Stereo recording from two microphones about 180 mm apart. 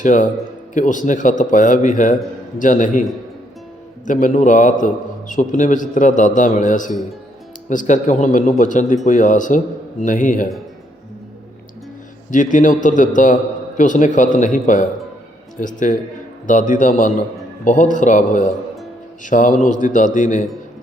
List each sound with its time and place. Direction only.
0.0 s a man's voice: 45° left (ahead or behind)
4.0 s a man's voice: 45° left (ahead or behind)
12.3 s a man's voice: 45° left (ahead or behind)